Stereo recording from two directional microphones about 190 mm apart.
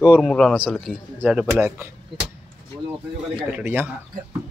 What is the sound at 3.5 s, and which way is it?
Speech, 10° right (ahead or behind).